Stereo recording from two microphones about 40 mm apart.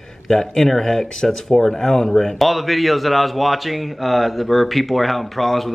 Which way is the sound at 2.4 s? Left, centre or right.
Centre.